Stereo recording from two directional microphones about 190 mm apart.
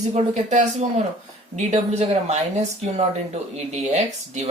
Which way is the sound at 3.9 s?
35° right (ahead or behind).